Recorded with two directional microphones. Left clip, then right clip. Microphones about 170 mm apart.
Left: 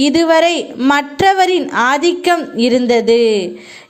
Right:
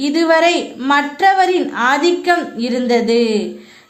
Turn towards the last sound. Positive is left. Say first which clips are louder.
# left 4 dB
turn(degrees=40)  # may be behind; listen again after turning